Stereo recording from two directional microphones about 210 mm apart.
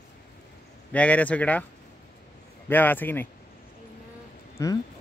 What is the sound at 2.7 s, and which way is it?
Speech, 10° left (ahead or behind).